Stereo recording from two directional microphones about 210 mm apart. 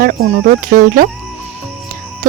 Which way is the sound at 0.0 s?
45° right (ahead or behind).